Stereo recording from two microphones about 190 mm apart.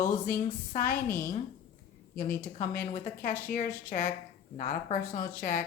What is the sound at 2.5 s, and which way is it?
Speech, 45° left (ahead or behind).